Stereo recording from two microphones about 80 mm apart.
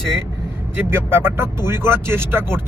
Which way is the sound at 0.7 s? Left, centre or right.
Right.